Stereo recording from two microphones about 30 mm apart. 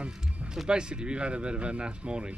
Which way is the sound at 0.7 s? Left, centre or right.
Right.